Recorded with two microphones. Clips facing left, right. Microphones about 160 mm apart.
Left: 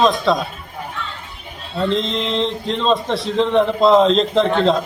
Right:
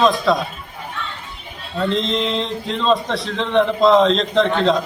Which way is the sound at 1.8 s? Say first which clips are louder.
Even; centre (ahead or behind).